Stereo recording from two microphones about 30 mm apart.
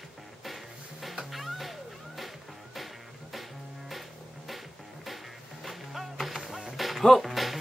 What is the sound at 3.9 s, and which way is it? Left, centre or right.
Music, centre.